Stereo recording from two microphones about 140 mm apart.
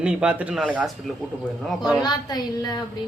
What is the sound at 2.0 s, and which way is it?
Speech, 30° left (ahead or behind).